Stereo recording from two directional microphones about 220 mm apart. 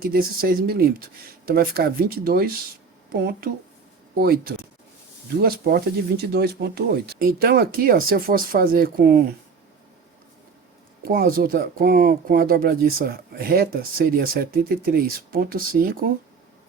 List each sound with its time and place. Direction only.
0.0 s speech: 40° right (ahead or behind)
11.0 s speech: 40° right (ahead or behind)